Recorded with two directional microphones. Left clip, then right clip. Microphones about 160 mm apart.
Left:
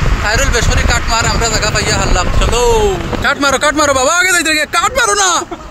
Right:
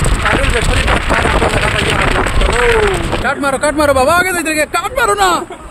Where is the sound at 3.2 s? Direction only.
45° left (ahead or behind).